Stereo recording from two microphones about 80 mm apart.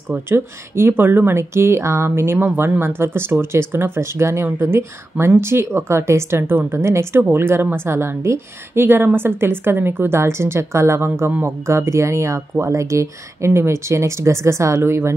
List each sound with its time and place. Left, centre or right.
0.3 s a woman's voice: right